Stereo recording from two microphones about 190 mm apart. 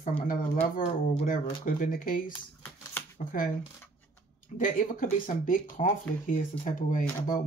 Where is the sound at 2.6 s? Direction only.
10° left (ahead or behind).